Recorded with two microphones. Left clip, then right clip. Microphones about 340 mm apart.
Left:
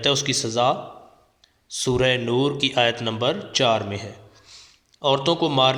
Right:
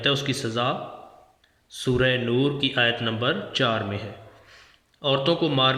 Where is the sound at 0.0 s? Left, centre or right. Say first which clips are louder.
Left 3 dB; centre.